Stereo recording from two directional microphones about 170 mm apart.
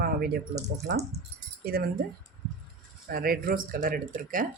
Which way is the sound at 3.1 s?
60° right (ahead or behind).